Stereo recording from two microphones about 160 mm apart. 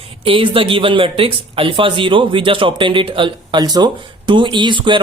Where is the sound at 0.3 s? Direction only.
35° right (ahead or behind).